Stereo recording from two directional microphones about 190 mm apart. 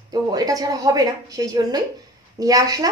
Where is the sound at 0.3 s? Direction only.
20° right (ahead or behind).